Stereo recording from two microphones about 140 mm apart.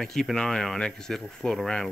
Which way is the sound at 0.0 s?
Centre (ahead or behind).